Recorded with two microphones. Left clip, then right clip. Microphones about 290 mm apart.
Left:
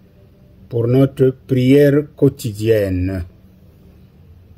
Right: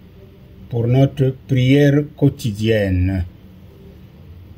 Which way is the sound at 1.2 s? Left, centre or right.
Left.